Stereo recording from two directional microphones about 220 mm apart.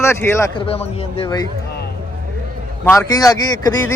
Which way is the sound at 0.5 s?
25° left (ahead or behind).